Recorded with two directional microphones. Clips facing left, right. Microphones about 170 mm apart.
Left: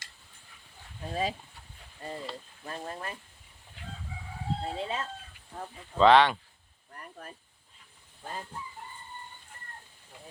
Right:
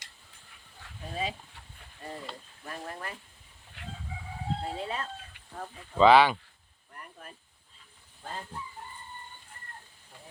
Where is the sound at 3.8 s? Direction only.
70° right (ahead or behind).